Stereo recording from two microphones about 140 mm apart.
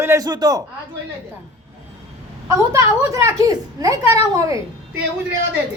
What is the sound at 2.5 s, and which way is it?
A man's voice, 20° right (ahead or behind).